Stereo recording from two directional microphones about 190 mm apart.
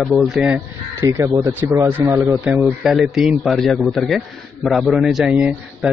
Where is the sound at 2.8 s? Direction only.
Centre (ahead or behind).